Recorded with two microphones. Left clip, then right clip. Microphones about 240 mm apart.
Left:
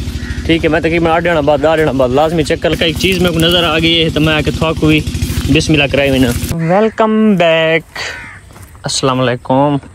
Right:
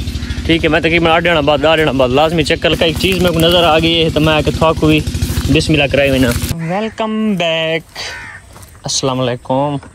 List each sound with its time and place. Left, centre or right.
0.5 s speech: centre